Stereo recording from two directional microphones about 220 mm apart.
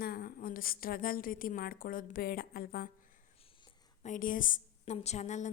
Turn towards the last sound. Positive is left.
turn(degrees=30)  # may be behind; listen again after turning